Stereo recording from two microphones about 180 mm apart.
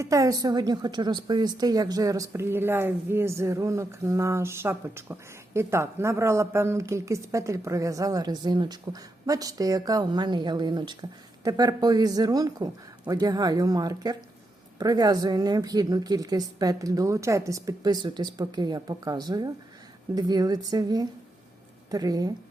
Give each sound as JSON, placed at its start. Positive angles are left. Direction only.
{"t": 0.0, "sound": "a woman's voice", "side_deg": -20}